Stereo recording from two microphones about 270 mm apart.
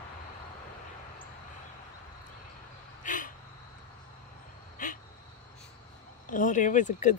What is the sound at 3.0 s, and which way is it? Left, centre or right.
Vehicle, left.